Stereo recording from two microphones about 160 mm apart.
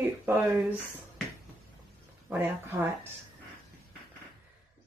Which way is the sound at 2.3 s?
10° right (ahead or behind).